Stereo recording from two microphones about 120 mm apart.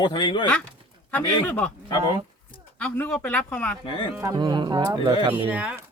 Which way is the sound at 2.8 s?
15° left (ahead or behind).